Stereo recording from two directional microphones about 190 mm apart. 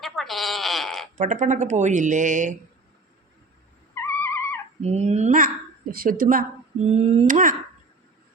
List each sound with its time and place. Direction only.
0.0 s sheep: centre (ahead or behind)
1.1 s speech: 40° right (ahead or behind)
4.0 s cat: 10° left (ahead or behind)
4.8 s speech: 35° right (ahead or behind)
6.8 s speech: 35° right (ahead or behind)